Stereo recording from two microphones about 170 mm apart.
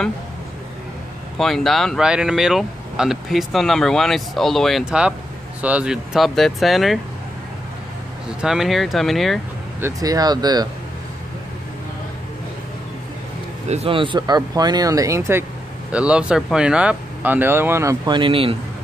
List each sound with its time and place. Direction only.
1.4 s speech: centre (ahead or behind)
8.4 s speech: centre (ahead or behind)
9.8 s speech: 15° right (ahead or behind)
13.7 s speech: 35° right (ahead or behind)